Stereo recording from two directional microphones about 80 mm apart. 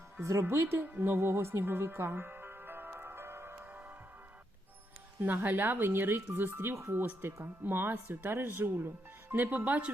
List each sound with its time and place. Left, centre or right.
0.2 s a woman's voice: right
3.6 s music: right
5.2 s speech: right